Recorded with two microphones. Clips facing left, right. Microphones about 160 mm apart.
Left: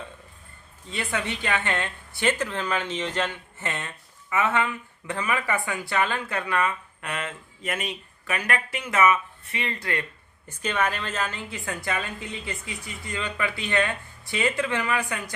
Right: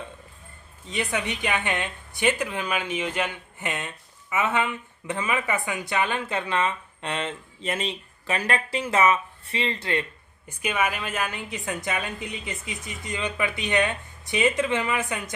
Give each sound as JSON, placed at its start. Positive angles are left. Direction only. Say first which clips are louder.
{"t": 0.9, "sound": "a woman's voice", "louder": "right 1 dB", "side_deg": -20}
{"t": 10.6, "sound": "a woman's voice", "louder": "even", "side_deg": -10}